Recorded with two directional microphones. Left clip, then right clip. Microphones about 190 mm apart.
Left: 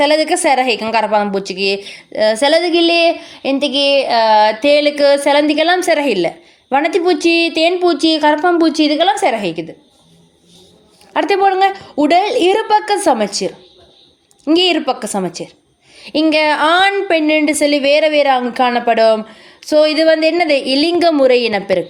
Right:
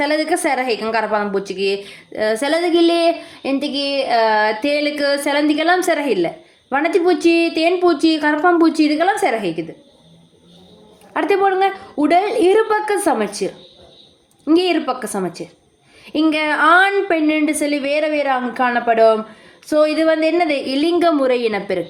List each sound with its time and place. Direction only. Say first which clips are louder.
0.0 s a woman's voice: left 5 dB; 40° left (ahead or behind)
11.1 s a woman's voice: left 3 dB; 40° left (ahead or behind)